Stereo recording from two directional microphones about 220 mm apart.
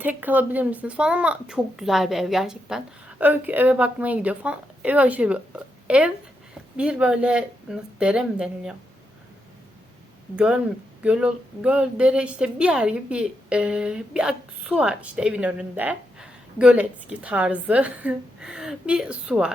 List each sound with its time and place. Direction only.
0.0 s a woman's voice: 10° right (ahead or behind)
10.3 s a woman's voice: 5° right (ahead or behind)